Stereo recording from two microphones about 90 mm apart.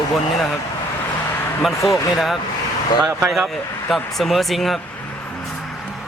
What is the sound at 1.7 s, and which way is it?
Speech, 35° left (ahead or behind).